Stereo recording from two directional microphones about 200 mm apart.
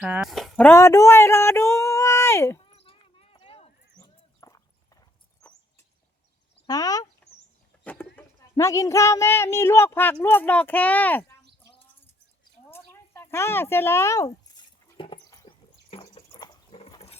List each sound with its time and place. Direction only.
0.0 s speech: 5° right (ahead or behind); by 2.6 s 10° left (ahead or behind)
2.6 s a sound: 25° left (ahead or behind)
5.4 s rodents: 5° left (ahead or behind)
6.7 s speech: 20° left (ahead or behind)
12.7 s a sound: 10° left (ahead or behind)
16.0 s dog: 25° left (ahead or behind)